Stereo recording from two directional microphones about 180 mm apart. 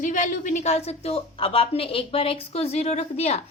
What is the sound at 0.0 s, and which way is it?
A woman's voice, 45° left (ahead or behind).